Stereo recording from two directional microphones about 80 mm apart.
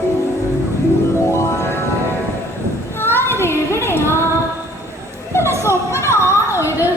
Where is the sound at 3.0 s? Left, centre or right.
Left.